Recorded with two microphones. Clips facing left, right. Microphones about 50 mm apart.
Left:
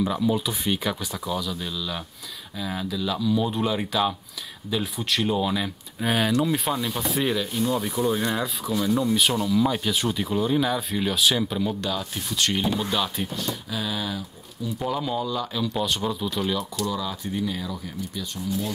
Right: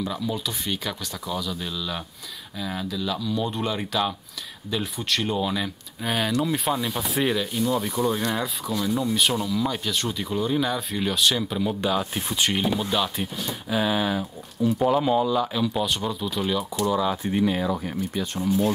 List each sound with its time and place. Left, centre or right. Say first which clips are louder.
0.0 s speech: left 5 dB; centre
11.8 s speech: right 4 dB; right
12.4 s speech: even; centre
13.7 s speech: right 10 dB; right
14.8 s speech: right 5 dB; centre
16.7 s speech: right 5 dB; right